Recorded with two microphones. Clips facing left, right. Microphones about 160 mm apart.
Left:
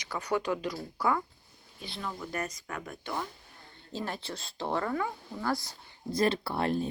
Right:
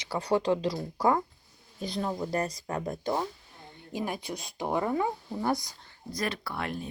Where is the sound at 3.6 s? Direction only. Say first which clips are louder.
Right 3 dB; 15° right (ahead or behind).